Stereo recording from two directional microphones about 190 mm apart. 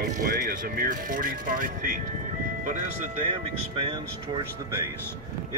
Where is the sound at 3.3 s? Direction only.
30° right (ahead or behind).